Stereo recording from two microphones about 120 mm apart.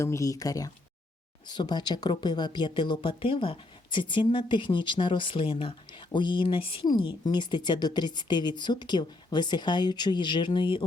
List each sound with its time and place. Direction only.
0.0 s speech: 25° left (ahead or behind); by 10.8 s 45° left (ahead or behind)